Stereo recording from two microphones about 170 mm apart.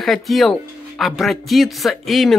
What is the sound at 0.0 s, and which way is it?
Speech, centre (ahead or behind).